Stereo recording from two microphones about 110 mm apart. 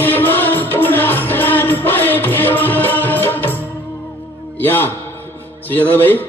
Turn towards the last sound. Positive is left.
turn(degrees=15)  # may be behind; listen again after turning